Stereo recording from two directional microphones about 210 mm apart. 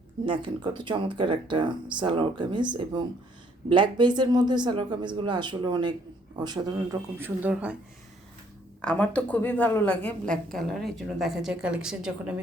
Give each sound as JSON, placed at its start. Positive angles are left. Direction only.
{"t": 0.3, "sound": "speech", "side_deg": -25}
{"t": 8.8, "sound": "a woman's voice", "side_deg": 5}